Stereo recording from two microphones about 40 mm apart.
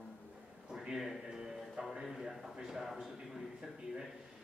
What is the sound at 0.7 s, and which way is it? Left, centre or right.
Music, centre.